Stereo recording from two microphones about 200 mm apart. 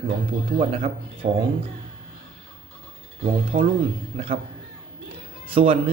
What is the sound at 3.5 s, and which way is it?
Speech, 30° right (ahead or behind).